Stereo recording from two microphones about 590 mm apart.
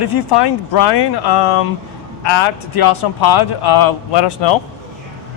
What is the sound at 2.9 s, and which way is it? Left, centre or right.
Speech, left.